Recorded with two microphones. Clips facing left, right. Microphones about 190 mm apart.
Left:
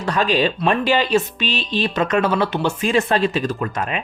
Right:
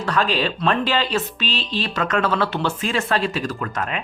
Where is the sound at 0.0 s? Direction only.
15° left (ahead or behind).